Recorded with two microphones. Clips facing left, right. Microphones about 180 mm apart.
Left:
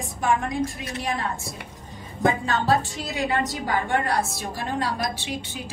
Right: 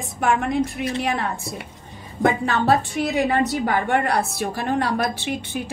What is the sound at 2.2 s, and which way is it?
A woman's voice, 60° right (ahead or behind).